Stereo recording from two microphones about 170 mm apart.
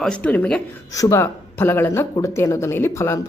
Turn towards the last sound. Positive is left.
turn(degrees=15)  # may be behind; listen again after turning